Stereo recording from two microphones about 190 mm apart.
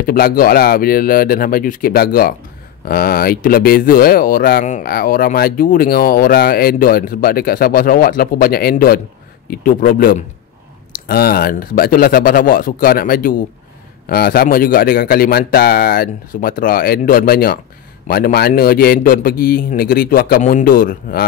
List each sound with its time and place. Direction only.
0.0 s speech: 50° left (ahead or behind)